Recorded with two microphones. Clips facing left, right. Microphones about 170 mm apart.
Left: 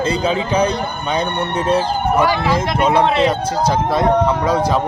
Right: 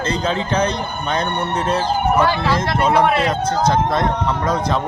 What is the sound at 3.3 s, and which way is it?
Speech, 10° left (ahead or behind).